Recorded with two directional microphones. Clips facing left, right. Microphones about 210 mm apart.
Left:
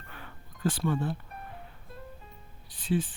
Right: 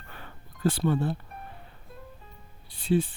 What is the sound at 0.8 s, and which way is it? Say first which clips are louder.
Speech: right 3 dB; 30° right (ahead or behind).